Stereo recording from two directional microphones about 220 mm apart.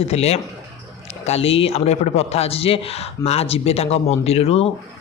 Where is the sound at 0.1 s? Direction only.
30° left (ahead or behind).